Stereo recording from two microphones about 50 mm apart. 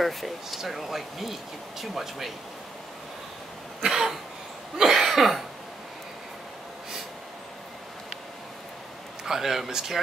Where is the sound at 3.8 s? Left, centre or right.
Centre.